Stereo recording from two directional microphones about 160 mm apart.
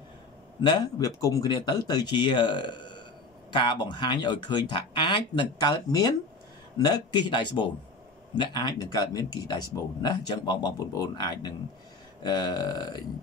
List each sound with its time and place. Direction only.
0.6 s speech: 30° left (ahead or behind)